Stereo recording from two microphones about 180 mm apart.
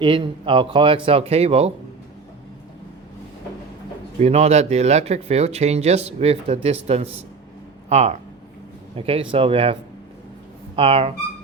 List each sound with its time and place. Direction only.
0.0 s speech: 30° right (ahead or behind)
4.2 s speech: 35° right (ahead or behind)
10.8 s speech: 30° right (ahead or behind)